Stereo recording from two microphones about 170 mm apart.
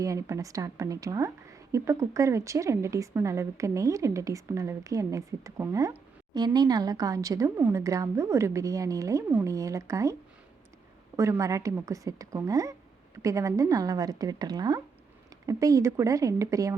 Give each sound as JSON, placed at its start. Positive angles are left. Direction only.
{"t": 0.0, "sound": "a woman's voice", "side_deg": -20}
{"t": 11.2, "sound": "a woman's voice", "side_deg": -20}